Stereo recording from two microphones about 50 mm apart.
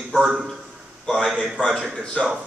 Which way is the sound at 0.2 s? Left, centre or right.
Centre.